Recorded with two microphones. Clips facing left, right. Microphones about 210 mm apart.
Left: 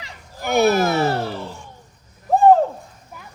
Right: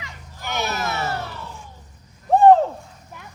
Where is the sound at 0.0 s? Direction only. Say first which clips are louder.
Left 6 dB; 45° left (ahead or behind).